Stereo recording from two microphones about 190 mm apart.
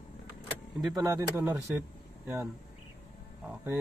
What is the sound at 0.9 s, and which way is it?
Speech, 15° right (ahead or behind).